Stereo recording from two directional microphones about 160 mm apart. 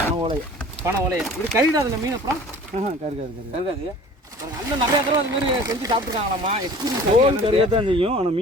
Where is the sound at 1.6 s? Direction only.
20° right (ahead or behind).